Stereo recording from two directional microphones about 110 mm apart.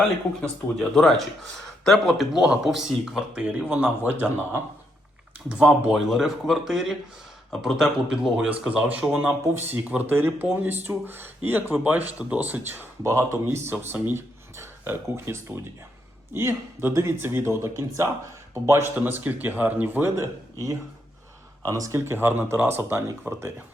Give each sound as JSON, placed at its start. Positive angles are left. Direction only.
{"t": 0.8, "sound": "speech", "side_deg": 0}
{"t": 5.5, "sound": "speech", "side_deg": -10}
{"t": 20.1, "sound": "speech", "side_deg": -30}